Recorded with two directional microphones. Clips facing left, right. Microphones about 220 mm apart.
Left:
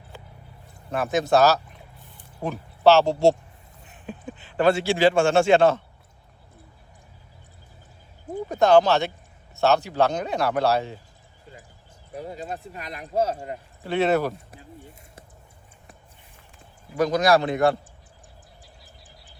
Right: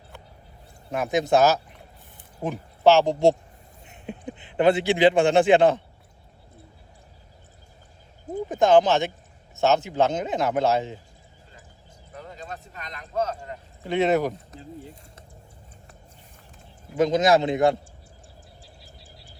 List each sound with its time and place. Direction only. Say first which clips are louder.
0.9 s a man's voice: even; 15° right (ahead or behind)
8.4 s speech: left 1 dB; 15° right (ahead or behind)
12.2 s a sound: left 5 dB; 35° left (ahead or behind)
13.8 s speech: even; 15° right (ahead or behind)
17.0 s speech: right 1 dB; 20° right (ahead or behind)